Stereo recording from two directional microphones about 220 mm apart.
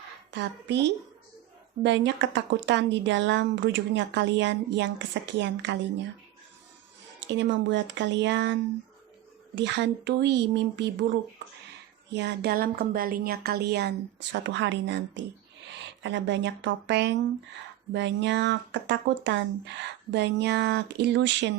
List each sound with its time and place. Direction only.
0.3 s speech: 50° right (ahead or behind)
7.3 s speech: 55° right (ahead or behind)
9.6 s speech: 55° right (ahead or behind)
12.1 s speech: 50° right (ahead or behind)